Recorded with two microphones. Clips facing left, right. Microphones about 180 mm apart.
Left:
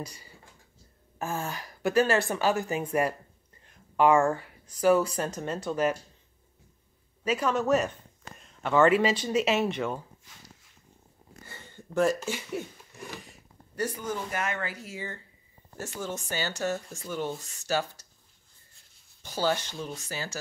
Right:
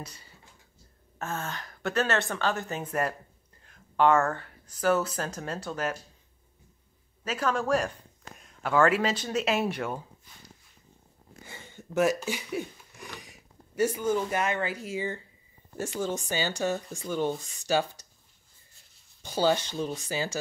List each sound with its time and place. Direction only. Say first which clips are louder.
1.5 s speech: left 5 dB; 5° left (ahead or behind)
2.2 s speech: left 3 dB; 15° left (ahead or behind)
2.6 s speech: left 3 dB; centre (ahead or behind)
7.2 s speech: left 2 dB; 5° left (ahead or behind)
11.4 s a sound: right 2 dB; 15° right (ahead or behind)
11.9 s speech: even; 5° right (ahead or behind)
13.8 s speech: right 7 dB; 20° right (ahead or behind)
17.0 s speech: right 6 dB; 25° right (ahead or behind)
19.2 s speech: right 3 dB; 15° right (ahead or behind)